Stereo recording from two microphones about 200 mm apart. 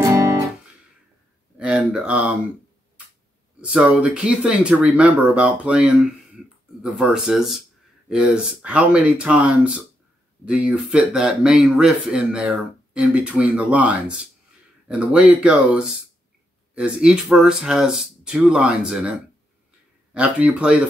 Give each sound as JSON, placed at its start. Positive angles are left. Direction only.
{"t": 0.0, "sound": "guitar", "side_deg": -15}
{"t": 1.6, "sound": "speech", "side_deg": -5}
{"t": 3.6, "sound": "speech", "side_deg": -5}
{"t": 20.2, "sound": "speech", "side_deg": -5}